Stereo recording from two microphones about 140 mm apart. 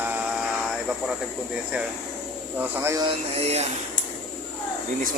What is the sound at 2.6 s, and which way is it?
Speech, 15° right (ahead or behind).